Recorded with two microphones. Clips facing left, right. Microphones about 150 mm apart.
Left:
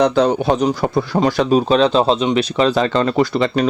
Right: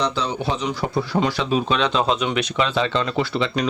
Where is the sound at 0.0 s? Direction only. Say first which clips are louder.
Left 9 dB; 50° left (ahead or behind).